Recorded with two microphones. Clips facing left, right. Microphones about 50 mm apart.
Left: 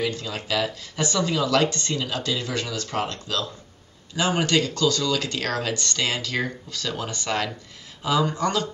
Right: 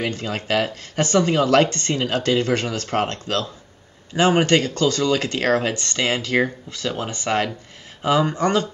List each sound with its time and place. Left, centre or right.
0.0 s speech: right